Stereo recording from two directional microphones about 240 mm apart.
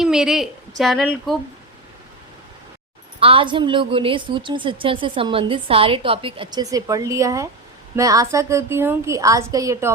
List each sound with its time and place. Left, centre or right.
0.0 s a woman's voice: centre
3.2 s a woman's voice: right